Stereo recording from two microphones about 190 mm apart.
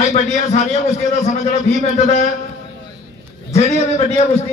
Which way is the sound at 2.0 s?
40° left (ahead or behind).